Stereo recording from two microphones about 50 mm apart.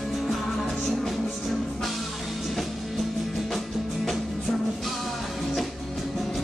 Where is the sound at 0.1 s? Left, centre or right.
Centre.